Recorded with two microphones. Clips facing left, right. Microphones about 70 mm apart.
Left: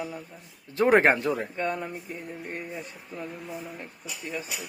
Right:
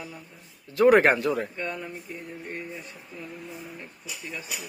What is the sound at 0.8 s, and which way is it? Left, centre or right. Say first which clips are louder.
Speech: right 2 dB; left.